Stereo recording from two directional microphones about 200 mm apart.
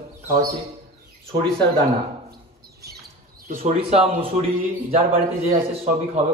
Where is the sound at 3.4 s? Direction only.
30° right (ahead or behind).